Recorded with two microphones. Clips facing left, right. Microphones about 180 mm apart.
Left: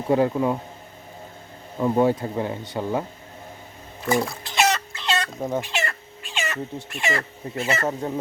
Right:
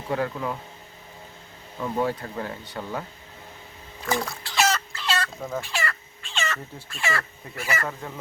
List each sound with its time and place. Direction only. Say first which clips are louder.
0.1 s speech: left 7 dB; 25° left (ahead or behind)
1.8 s speech: left 7 dB; 25° left (ahead or behind)
4.1 s chicken: left 4 dB; 20° left (ahead or behind)
6.4 s speech: left 3 dB; 15° left (ahead or behind)